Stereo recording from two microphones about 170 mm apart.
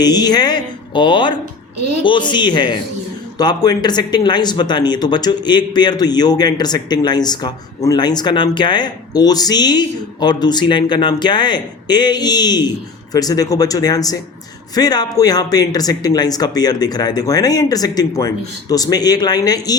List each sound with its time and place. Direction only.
0.0 s speech: 25° left (ahead or behind)